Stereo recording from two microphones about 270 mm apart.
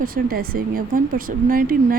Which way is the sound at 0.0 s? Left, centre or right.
Right.